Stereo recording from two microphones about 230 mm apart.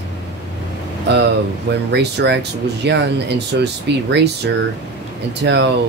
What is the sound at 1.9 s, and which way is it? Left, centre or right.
Speech, right.